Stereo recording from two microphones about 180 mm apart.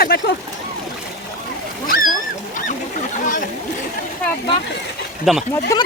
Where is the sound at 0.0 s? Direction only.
60° left (ahead or behind).